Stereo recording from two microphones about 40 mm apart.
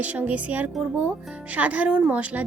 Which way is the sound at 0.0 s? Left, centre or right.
Right.